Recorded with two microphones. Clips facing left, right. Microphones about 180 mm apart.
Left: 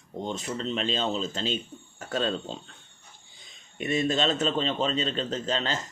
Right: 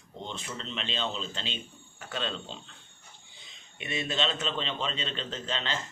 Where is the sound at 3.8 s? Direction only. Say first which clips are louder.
Left 6 dB; 45° left (ahead or behind).